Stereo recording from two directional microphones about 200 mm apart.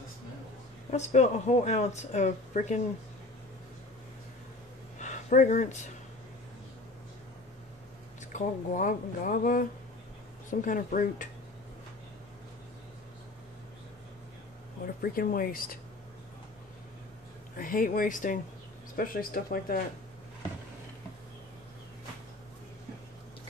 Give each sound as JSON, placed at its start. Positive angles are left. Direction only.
{"t": 0.8, "sound": "speech", "side_deg": 35}
{"t": 5.0, "sound": "a sound", "side_deg": 40}
{"t": 8.2, "sound": "speech", "side_deg": 40}
{"t": 15.0, "sound": "speech", "side_deg": 45}
{"t": 17.6, "sound": "speech", "side_deg": 45}